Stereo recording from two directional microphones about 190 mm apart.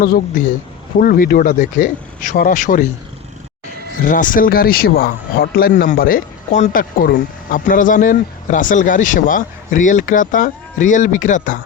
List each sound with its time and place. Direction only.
0.0 s speech: 50° left (ahead or behind)
4.0 s speech: 45° left (ahead or behind)